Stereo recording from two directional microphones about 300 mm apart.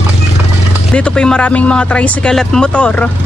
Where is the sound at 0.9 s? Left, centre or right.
Centre.